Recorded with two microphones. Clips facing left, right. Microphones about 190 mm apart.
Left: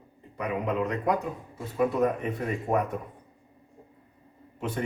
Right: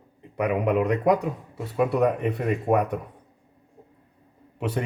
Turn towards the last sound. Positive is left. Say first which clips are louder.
# right 4 dB
turn(degrees=-70)  # may be behind; listen again after turning